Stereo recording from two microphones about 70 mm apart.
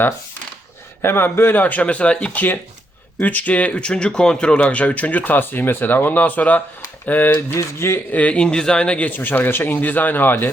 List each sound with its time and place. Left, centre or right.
1.0 s speech: left
7.3 s speech: left
8.1 s speech: centre